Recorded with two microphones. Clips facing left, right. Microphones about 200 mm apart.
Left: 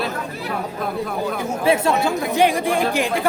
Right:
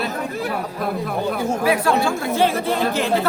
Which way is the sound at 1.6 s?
25° left (ahead or behind).